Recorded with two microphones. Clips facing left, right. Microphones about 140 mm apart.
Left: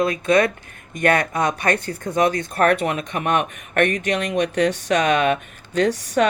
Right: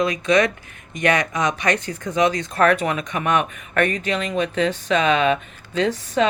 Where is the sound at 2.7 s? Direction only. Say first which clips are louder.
Even; 35° left (ahead or behind).